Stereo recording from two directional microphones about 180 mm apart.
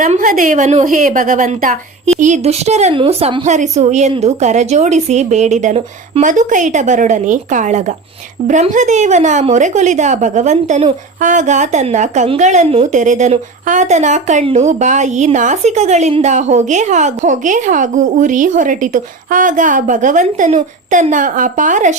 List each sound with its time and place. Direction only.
0.0 s a woman's voice: 50° right (ahead or behind)